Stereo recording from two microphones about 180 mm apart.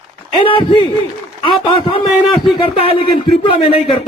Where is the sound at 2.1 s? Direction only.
Centre (ahead or behind).